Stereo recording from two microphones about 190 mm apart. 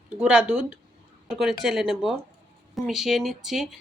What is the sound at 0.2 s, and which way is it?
A woman's voice, 5° right (ahead or behind).